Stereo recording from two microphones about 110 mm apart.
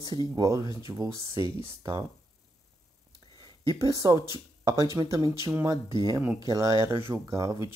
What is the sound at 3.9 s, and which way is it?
Speech, 35° right (ahead or behind).